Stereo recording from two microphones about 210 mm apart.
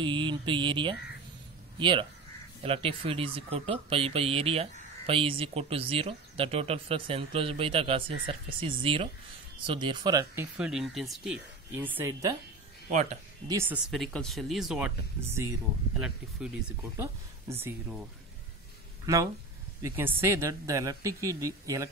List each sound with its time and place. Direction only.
0.0 s speech: 25° right (ahead or behind)
10.6 s speech: centre (ahead or behind)
13.5 s speech: 10° right (ahead or behind)
13.8 s speech: centre (ahead or behind)
19.8 s speech: 10° right (ahead or behind)